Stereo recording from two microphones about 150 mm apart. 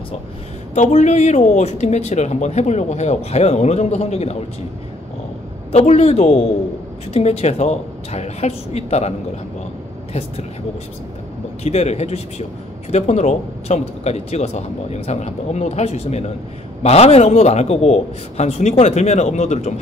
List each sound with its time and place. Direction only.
0.7 s speech: 50° left (ahead or behind)
5.7 s speech: 45° left (ahead or behind)
11.6 s speech: 45° left (ahead or behind)